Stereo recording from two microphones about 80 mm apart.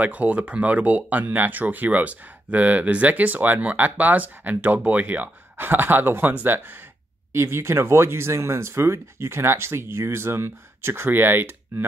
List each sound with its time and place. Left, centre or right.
0.0 s speech: centre